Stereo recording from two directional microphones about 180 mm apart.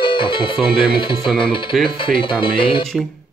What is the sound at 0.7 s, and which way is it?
Speech, 25° left (ahead or behind).